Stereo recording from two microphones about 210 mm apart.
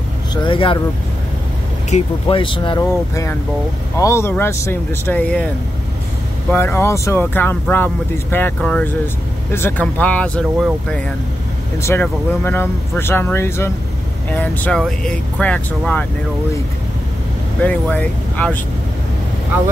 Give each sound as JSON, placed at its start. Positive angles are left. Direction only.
{"t": 0.3, "sound": "speech", "side_deg": 20}
{"t": 1.9, "sound": "speech", "side_deg": 30}
{"t": 6.5, "sound": "speech", "side_deg": 10}
{"t": 17.6, "sound": "speech", "side_deg": 5}